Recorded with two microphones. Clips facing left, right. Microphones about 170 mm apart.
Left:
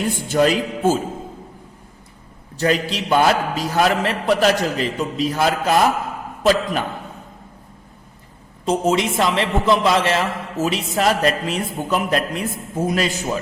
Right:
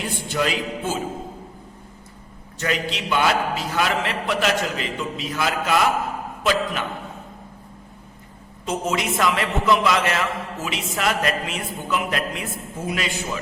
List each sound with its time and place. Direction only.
0.3 s a man's voice: 40° left (ahead or behind)
2.6 s a man's voice: 35° left (ahead or behind)
8.6 s a man's voice: 30° left (ahead or behind)